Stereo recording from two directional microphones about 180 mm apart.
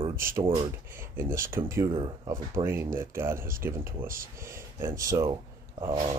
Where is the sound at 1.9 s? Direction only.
25° right (ahead or behind).